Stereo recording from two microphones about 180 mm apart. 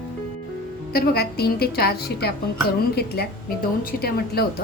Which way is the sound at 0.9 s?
60° left (ahead or behind).